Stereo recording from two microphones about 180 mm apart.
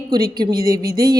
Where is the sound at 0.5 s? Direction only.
55° right (ahead or behind).